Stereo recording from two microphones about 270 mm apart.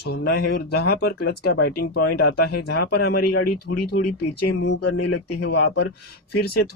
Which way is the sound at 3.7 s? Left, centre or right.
Left.